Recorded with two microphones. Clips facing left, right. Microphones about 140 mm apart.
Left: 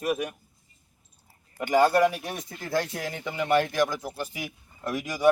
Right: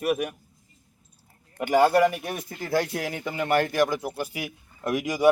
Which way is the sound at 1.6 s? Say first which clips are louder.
Right 1 dB; 10° right (ahead or behind).